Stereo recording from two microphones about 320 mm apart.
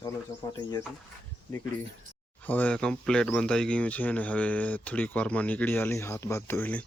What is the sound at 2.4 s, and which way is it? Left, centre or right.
Speech, centre.